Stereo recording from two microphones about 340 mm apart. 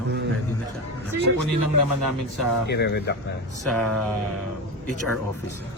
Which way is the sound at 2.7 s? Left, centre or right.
Left.